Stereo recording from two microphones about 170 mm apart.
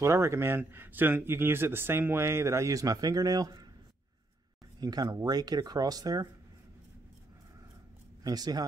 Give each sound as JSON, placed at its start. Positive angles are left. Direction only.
{"t": 0.0, "sound": "speech", "side_deg": -15}
{"t": 4.7, "sound": "speech", "side_deg": -25}
{"t": 8.2, "sound": "speech", "side_deg": -20}